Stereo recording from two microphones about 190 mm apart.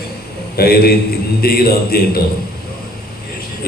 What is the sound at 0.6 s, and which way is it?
A man's voice, 55° left (ahead or behind).